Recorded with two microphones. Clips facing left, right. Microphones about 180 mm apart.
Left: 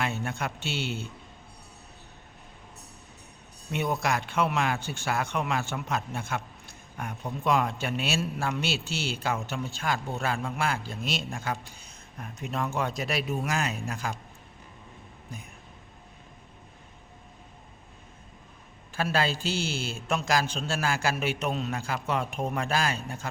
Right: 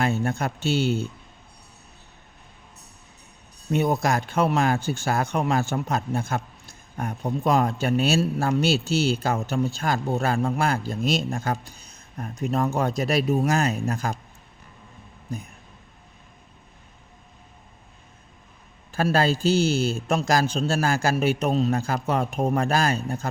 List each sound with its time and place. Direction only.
0.0 s speech: 40° right (ahead or behind)
3.7 s speech: 40° right (ahead or behind)
15.3 s speech: 40° right (ahead or behind)
18.9 s speech: 40° right (ahead or behind)